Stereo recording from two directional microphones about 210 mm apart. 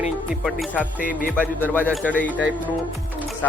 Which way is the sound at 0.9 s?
40° left (ahead or behind).